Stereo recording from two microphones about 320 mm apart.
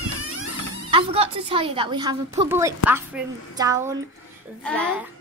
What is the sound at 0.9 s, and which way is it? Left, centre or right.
A woman's voice, centre.